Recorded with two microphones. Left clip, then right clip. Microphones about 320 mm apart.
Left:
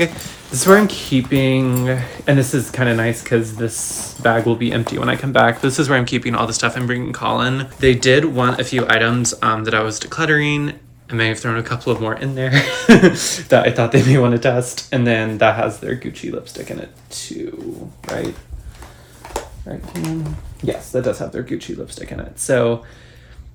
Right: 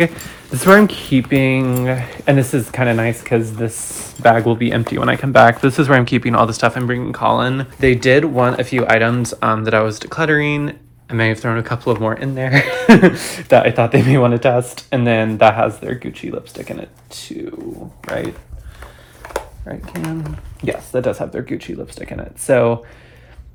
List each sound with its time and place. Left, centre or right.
0.0 s speech: centre
19.7 s speech: centre